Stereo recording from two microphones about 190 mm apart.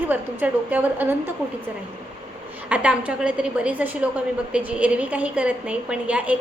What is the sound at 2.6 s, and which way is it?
A woman's voice, 5° right (ahead or behind).